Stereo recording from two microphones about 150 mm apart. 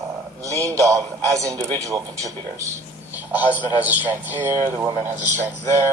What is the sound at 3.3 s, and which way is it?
A man's voice, 10° right (ahead or behind).